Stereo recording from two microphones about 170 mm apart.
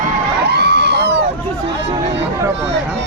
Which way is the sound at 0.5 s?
75° right (ahead or behind).